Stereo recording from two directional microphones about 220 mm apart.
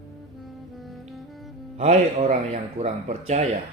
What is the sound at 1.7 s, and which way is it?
Speech, 30° right (ahead or behind).